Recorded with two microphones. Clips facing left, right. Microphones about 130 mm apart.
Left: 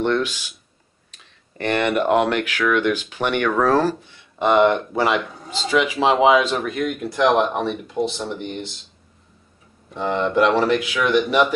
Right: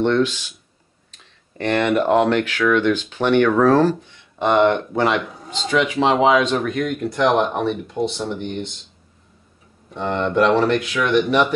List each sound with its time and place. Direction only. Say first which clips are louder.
0.0 s speech: right 3 dB; 10° left (ahead or behind)
1.6 s speech: right 2 dB; 5° left (ahead or behind)
9.8 s speech: even; centre (ahead or behind)